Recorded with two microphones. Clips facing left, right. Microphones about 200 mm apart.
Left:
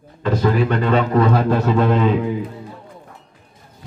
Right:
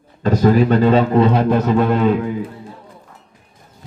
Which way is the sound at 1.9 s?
Centre (ahead or behind).